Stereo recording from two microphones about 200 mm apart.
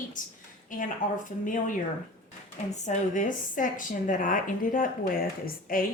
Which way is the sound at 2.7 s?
35° left (ahead or behind).